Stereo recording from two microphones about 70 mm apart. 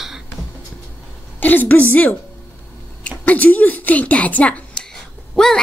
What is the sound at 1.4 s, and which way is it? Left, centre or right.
A woman's voice, left.